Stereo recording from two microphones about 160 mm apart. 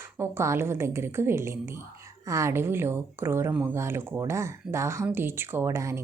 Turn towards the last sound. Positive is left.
turn(degrees=-15)  # may be behind; listen again after turning